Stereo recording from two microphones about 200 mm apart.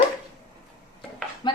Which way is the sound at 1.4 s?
25° left (ahead or behind).